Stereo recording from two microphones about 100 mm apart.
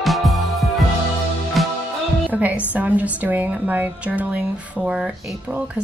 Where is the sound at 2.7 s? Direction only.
15° right (ahead or behind).